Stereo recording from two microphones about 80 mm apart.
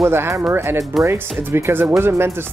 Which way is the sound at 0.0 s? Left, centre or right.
Right.